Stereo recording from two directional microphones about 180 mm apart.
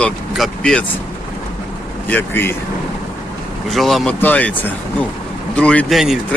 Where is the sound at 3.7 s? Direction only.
Centre (ahead or behind).